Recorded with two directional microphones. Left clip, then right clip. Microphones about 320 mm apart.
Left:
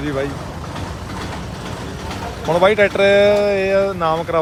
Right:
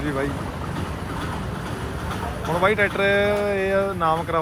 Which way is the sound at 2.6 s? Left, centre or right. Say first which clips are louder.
Left 6 dB; centre.